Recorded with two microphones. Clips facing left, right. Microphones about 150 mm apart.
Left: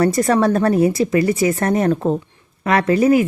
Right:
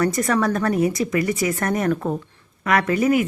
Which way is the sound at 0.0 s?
35° left (ahead or behind).